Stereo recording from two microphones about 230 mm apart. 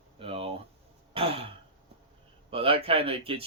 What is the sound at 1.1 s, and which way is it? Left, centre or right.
Throat clearing, right.